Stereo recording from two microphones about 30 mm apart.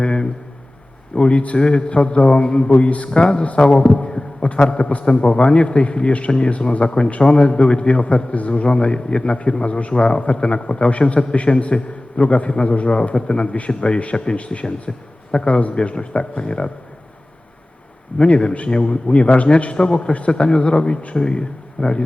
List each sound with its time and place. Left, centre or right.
0.0 s a sound: left
1.1 s a man's voice: left
15.4 s a man's voice: left
18.1 s speech: left
18.7 s a man's voice: left
19.7 s a man's voice: left